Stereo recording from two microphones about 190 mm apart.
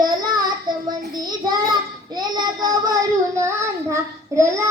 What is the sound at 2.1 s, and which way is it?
Child singing, 20° right (ahead or behind).